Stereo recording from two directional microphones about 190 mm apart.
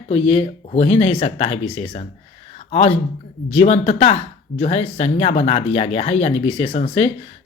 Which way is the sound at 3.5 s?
35° left (ahead or behind).